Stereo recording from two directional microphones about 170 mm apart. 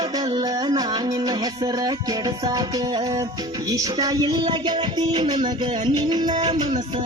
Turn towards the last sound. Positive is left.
turn(degrees=-25)  # may be behind; listen again after turning